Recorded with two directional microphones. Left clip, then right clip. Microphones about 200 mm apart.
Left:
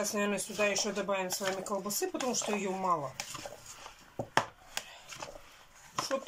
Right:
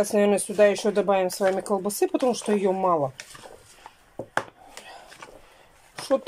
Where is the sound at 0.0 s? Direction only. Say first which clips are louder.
Right 12 dB; 45° right (ahead or behind).